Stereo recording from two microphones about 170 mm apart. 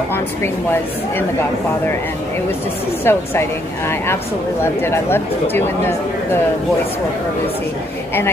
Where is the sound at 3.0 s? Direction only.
15° left (ahead or behind).